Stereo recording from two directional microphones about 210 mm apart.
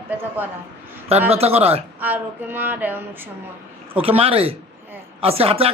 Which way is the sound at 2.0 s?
10° right (ahead or behind).